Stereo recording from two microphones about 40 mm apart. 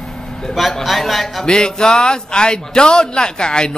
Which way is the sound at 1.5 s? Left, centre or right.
Centre.